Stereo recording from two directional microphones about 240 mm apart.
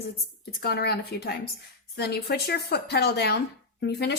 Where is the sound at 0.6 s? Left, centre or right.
Left.